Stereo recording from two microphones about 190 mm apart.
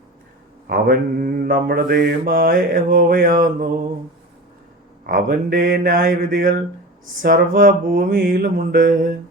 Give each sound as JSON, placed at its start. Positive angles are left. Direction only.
{"t": 0.7, "sound": "mantra", "side_deg": -50}
{"t": 5.0, "sound": "mantra", "side_deg": -50}